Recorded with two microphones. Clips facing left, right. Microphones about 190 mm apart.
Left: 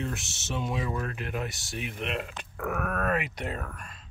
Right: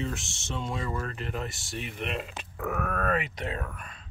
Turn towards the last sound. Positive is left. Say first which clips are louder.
# right 1 dB
turn(degrees=0)  # may be behind; listen again after turning